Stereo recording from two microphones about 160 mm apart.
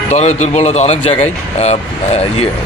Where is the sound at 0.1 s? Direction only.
45° left (ahead or behind).